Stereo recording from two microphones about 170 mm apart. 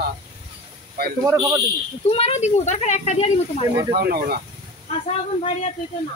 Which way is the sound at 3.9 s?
65° right (ahead or behind).